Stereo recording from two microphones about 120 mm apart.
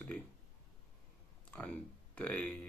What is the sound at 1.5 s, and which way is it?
Speech, 10° left (ahead or behind).